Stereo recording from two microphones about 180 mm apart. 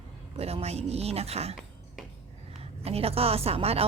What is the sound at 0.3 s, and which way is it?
A woman's voice, 35° right (ahead or behind).